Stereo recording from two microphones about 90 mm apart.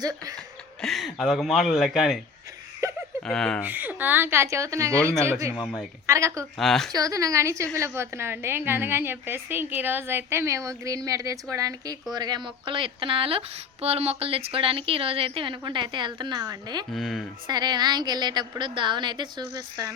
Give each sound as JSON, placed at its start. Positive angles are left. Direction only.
{"t": 0.0, "sound": "a woman's voice", "side_deg": -45}
{"t": 0.8, "sound": "speech", "side_deg": 0}
{"t": 2.8, "sound": "a sound", "side_deg": -35}
{"t": 3.2, "sound": "speech", "side_deg": 5}
{"t": 3.6, "sound": "a woman's voice", "side_deg": -20}
{"t": 6.6, "sound": "speech", "side_deg": 5}
{"t": 6.9, "sound": "a woman's voice", "side_deg": -40}
{"t": 12.1, "sound": "a woman's voice", "side_deg": -50}
{"t": 16.9, "sound": "speech", "side_deg": 0}
{"t": 17.4, "sound": "a woman's voice", "side_deg": -50}